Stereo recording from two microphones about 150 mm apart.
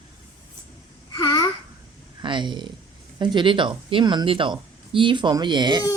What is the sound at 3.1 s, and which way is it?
Speech, 30° right (ahead or behind).